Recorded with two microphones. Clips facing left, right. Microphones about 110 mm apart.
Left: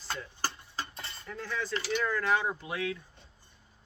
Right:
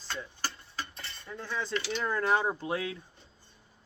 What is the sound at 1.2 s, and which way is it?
Speech, 20° right (ahead or behind).